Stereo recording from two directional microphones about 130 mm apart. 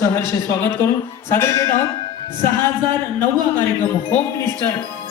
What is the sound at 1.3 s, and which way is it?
Music, 20° left (ahead or behind).